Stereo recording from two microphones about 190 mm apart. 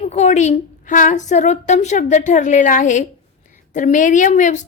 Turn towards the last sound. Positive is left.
turn(degrees=40)  # may be behind; listen again after turning